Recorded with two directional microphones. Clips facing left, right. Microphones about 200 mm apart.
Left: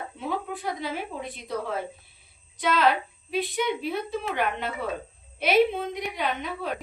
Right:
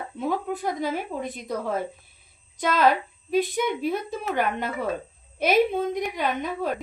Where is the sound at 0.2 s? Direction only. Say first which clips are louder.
Right 5 dB; 45° right (ahead or behind).